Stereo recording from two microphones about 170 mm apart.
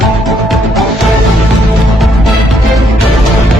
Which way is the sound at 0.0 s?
Centre (ahead or behind).